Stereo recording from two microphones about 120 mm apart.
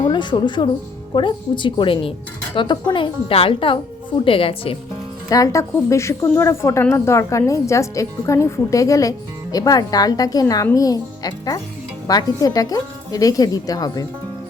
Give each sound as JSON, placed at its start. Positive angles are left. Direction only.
{"t": 0.1, "sound": "a woman's voice", "side_deg": 40}
{"t": 5.3, "sound": "a woman's voice", "side_deg": 30}